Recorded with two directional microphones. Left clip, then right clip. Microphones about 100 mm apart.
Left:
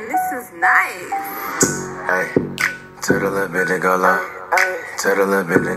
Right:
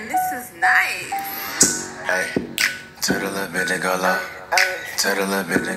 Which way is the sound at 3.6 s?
35° left (ahead or behind).